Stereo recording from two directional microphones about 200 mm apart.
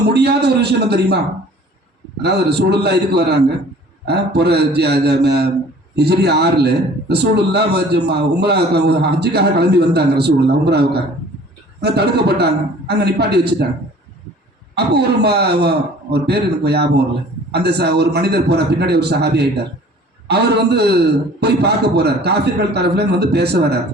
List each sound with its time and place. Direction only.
0.1 s a man's voice: 55° right (ahead or behind)
2.2 s a man's voice: 55° right (ahead or behind)
14.8 s a man's voice: 55° right (ahead or behind)